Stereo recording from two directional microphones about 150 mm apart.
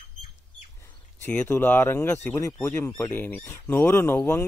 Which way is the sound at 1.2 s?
15° left (ahead or behind).